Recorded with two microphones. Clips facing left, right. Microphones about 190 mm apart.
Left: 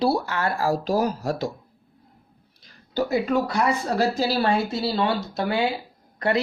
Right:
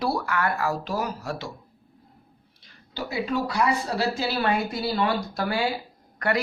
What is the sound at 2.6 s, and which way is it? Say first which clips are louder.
A woman's voice: left 9 dB; 45° left (ahead or behind).